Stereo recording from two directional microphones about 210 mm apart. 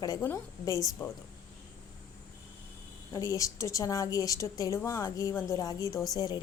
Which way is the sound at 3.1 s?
15° left (ahead or behind).